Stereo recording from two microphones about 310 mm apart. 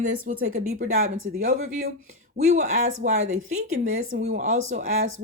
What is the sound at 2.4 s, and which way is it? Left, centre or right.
Speech, right.